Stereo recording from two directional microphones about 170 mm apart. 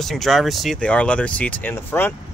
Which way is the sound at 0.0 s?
Centre (ahead or behind).